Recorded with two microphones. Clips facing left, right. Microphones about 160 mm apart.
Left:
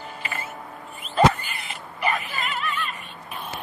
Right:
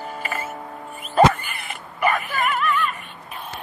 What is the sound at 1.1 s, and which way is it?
Creak, 55° right (ahead or behind).